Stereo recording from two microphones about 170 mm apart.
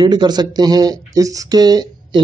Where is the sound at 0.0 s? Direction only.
25° right (ahead or behind).